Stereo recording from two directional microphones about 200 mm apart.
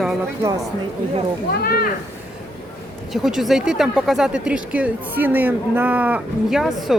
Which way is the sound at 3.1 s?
Centre (ahead or behind).